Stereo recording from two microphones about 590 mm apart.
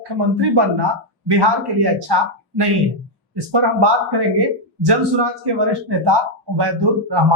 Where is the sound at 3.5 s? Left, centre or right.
Right.